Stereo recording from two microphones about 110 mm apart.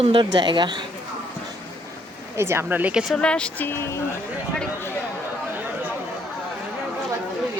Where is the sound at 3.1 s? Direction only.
10° left (ahead or behind); by 4.0 s 25° left (ahead or behind).